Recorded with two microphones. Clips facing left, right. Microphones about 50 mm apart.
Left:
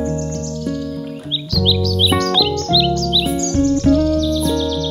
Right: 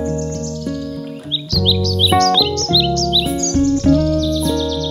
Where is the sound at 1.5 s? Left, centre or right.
Centre.